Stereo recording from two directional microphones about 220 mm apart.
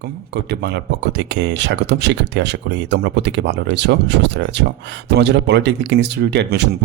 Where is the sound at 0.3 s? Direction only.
50° right (ahead or behind).